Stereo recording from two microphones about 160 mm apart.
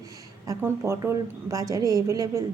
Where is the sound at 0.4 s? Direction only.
15° right (ahead or behind).